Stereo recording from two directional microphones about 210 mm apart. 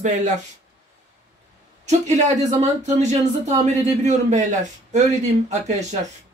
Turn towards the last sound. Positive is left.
turn(degrees=-35)  # may be behind; listen again after turning